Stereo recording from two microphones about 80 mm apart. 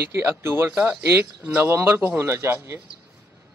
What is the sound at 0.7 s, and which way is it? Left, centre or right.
A man's voice, centre.